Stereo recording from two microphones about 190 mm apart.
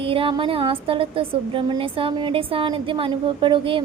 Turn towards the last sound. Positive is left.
turn(degrees=-25)  # may be behind; listen again after turning